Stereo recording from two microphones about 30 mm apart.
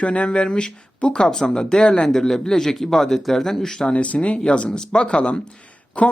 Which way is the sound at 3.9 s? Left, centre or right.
Left.